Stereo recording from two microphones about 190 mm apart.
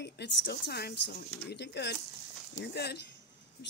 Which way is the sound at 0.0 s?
65° left (ahead or behind).